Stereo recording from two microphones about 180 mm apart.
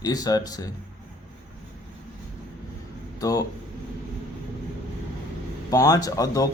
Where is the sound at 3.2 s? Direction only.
20° left (ahead or behind).